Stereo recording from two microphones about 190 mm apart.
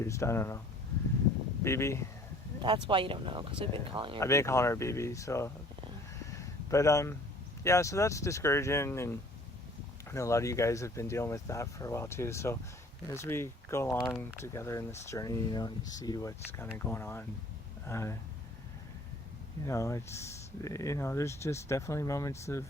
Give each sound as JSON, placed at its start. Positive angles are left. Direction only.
{"t": 0.0, "sound": "speech", "side_deg": 15}
{"t": 1.6, "sound": "speech", "side_deg": 15}
{"t": 2.6, "sound": "speech", "side_deg": -25}
{"t": 4.2, "sound": "speech", "side_deg": 15}
{"t": 6.7, "sound": "speech", "side_deg": 15}
{"t": 19.6, "sound": "speech", "side_deg": 15}